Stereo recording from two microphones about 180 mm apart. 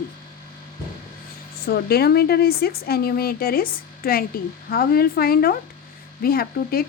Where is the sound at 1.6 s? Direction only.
60° left (ahead or behind).